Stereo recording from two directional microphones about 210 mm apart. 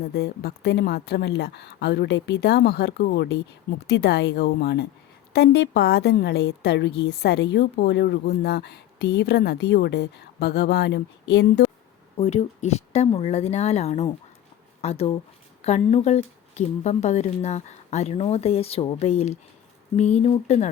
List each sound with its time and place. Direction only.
0.0 s a woman's voice: 50° left (ahead or behind)
12.1 s a woman's voice: 30° left (ahead or behind)